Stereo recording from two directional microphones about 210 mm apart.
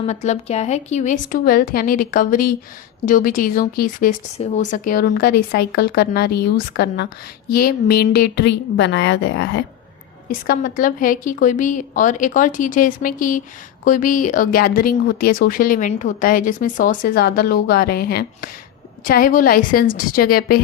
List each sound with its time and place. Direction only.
0.1 s a woman's voice: 35° left (ahead or behind); by 9.6 s 55° left (ahead or behind)
10.2 s a woman's voice: 45° left (ahead or behind)